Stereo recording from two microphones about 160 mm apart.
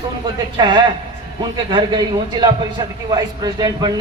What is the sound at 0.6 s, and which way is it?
Speech, 30° right (ahead or behind).